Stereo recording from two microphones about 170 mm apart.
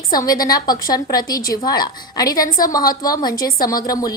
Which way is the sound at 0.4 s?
25° left (ahead or behind).